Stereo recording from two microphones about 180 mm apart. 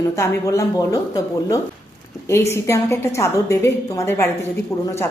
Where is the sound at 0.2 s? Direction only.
15° left (ahead or behind).